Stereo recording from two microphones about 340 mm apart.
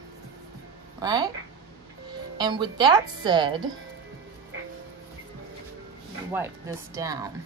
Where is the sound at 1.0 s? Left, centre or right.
Centre.